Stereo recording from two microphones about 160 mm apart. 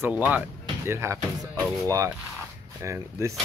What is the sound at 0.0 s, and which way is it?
Speech, 10° right (ahead or behind).